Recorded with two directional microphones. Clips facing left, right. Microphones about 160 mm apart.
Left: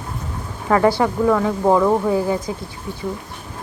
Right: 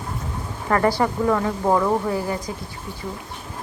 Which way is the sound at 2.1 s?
20° left (ahead or behind).